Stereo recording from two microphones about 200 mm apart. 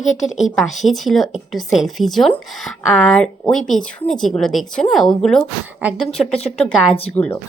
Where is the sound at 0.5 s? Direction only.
Centre (ahead or behind).